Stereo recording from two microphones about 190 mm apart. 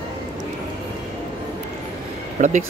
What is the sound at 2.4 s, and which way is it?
Speech, 40° right (ahead or behind).